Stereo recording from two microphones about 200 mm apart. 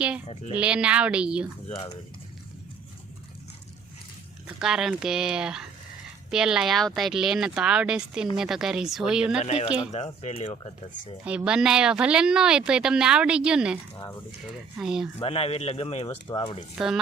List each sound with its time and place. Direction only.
0.3 s speech: 30° left (ahead or behind)
0.6 s speech: 5° right (ahead or behind)
1.6 s speech: 30° left (ahead or behind)
4.4 s speech: 5° right (ahead or behind)
9.4 s speech: 30° left (ahead or behind)
11.3 s speech: 5° right (ahead or behind)
14.8 s speech: centre (ahead or behind)
15.2 s speech: 30° left (ahead or behind)
16.7 s speech: centre (ahead or behind)